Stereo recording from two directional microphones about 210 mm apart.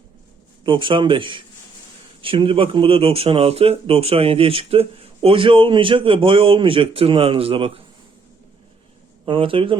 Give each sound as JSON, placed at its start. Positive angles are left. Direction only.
{"t": 0.6, "sound": "speech", "side_deg": -25}
{"t": 9.2, "sound": "speech", "side_deg": -25}